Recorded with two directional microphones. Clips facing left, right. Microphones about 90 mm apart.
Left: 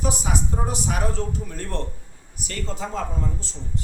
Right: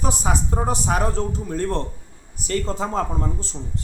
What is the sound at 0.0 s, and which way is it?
Speech, 40° right (ahead or behind).